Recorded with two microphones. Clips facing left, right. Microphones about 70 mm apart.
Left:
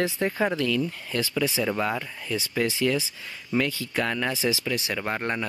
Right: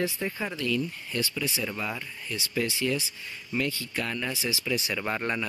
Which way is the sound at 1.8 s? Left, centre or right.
Left.